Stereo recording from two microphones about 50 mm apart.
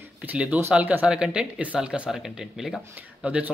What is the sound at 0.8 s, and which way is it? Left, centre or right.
Speech, right.